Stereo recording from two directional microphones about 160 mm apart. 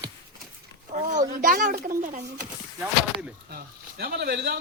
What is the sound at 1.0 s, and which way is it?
Speech, 55° right (ahead or behind).